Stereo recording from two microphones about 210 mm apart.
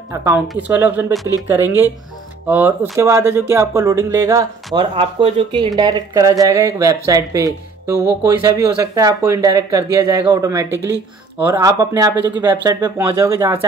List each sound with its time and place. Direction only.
0.1 s speech: 10° right (ahead or behind)
4.7 s speech: 25° right (ahead or behind)